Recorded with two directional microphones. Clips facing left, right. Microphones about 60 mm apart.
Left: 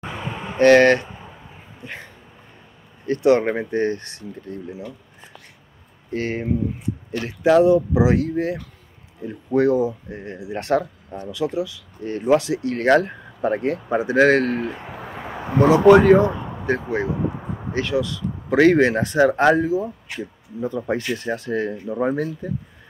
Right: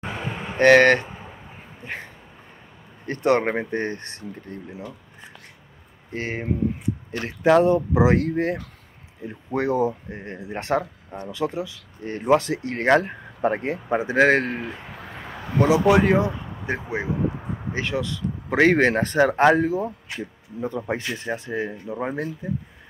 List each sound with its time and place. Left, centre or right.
0.6 s speech: right
3.1 s speech: right
3.4 s speech: right
6.1 s speech: right
7.1 s speech: right
9.2 s speech: right
14.6 s a sound: centre
15.4 s a man's voice: left
16.6 s speech: centre
17.3 s a sound: centre
17.7 s speech: right
19.6 s speech: right; by 22.5 s centre